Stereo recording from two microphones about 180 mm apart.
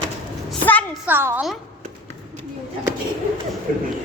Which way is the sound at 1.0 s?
10° right (ahead or behind).